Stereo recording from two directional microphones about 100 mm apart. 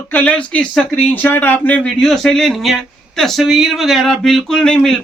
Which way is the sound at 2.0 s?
5° left (ahead or behind).